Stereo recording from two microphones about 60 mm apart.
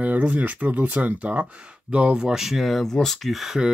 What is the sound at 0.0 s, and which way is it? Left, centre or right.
Speech, right.